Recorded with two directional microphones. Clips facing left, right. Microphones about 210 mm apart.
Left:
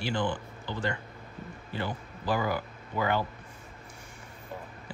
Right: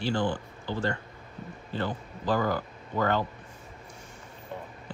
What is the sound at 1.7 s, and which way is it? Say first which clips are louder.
Speech: right 3 dB; 10° left (ahead or behind).